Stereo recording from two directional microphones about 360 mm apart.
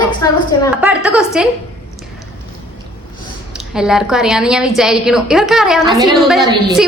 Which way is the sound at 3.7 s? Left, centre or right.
Centre.